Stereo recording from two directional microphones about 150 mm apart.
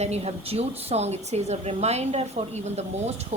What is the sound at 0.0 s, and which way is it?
Speech, 45° right (ahead or behind).